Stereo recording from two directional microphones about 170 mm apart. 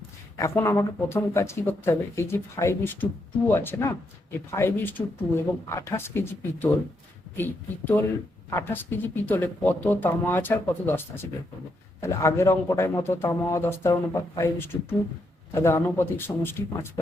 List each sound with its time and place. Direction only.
0.3 s speech: 15° left (ahead or behind)